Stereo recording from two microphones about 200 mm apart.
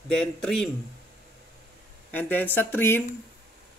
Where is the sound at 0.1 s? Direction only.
5° left (ahead or behind).